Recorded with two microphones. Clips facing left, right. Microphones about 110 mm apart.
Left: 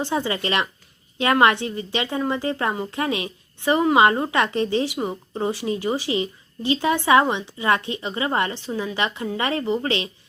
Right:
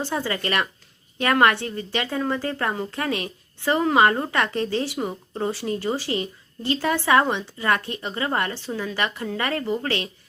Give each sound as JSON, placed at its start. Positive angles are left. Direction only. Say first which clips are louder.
{"t": 0.0, "sound": "a woman's voice", "louder": "left 2 dB", "side_deg": 20}